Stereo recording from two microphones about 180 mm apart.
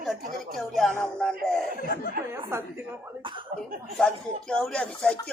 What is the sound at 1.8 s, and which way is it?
Speech, 55° left (ahead or behind).